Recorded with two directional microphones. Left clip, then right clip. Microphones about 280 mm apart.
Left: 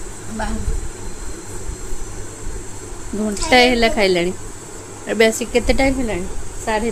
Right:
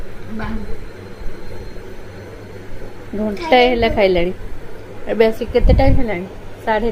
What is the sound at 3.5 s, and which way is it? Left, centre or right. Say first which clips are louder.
A woman's voice: even; centre.